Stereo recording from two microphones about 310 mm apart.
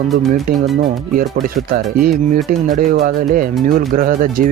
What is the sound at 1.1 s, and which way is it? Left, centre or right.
Speech, right.